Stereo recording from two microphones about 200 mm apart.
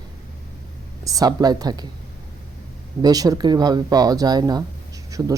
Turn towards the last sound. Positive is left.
turn(degrees=-15)  # may be behind; listen again after turning